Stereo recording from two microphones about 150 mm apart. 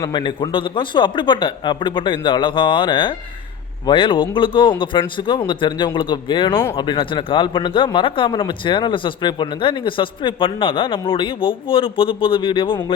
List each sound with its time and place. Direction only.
0.0 s speech: 30° left (ahead or behind)